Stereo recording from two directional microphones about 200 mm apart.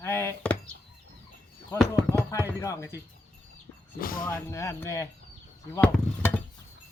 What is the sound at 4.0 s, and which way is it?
Speech, 45° left (ahead or behind).